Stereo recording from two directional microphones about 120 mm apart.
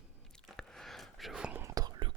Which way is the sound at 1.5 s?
25° right (ahead or behind).